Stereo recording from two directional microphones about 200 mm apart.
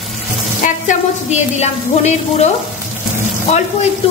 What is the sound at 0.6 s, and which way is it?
A woman's voice, 35° left (ahead or behind).